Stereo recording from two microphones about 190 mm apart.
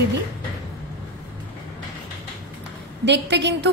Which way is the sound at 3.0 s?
65° right (ahead or behind).